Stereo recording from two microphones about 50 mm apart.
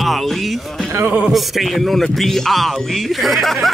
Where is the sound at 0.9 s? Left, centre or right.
Right.